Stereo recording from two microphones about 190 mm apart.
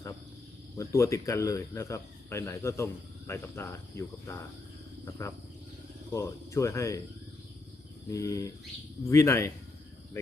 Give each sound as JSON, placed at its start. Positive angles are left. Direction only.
{"t": 0.8, "sound": "speech", "side_deg": 15}
{"t": 8.1, "sound": "speech", "side_deg": 15}